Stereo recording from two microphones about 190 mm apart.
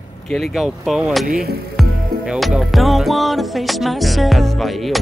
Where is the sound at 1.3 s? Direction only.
55° right (ahead or behind).